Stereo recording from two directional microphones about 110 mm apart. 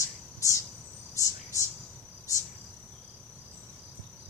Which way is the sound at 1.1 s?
30° left (ahead or behind).